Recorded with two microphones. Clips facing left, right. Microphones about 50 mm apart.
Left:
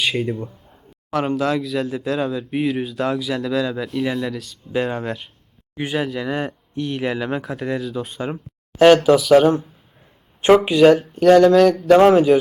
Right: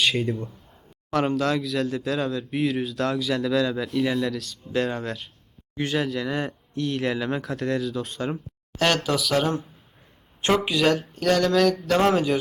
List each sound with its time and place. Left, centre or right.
0.0 s speech: centre
10.6 s speech: centre
11.9 s speech: centre